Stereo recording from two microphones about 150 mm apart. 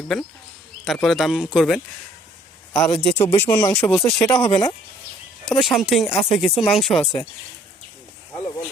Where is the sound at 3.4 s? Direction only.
25° left (ahead or behind).